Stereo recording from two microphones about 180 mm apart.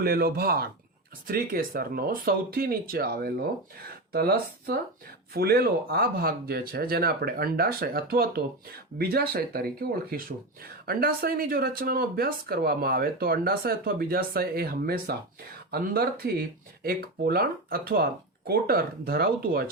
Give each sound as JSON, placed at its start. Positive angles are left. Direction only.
{"t": 0.0, "sound": "speech", "side_deg": -55}